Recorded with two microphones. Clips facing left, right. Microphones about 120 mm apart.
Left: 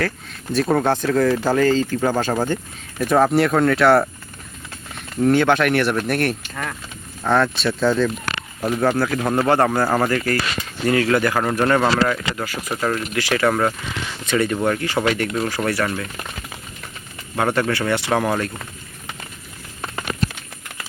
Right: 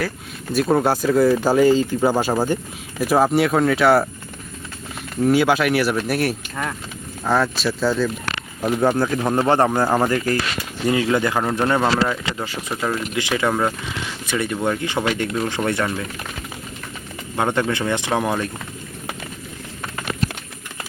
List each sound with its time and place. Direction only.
0.5 s speech: 5° right (ahead or behind)
5.2 s speech: 5° right (ahead or behind)
8.8 s speech: 15° right (ahead or behind)
17.3 s speech: 20° right (ahead or behind)